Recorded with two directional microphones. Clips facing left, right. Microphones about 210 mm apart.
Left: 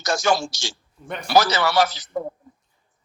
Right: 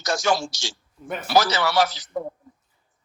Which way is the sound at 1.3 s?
50° left (ahead or behind).